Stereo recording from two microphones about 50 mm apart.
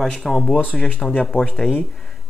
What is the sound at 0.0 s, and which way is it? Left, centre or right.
Speech, centre.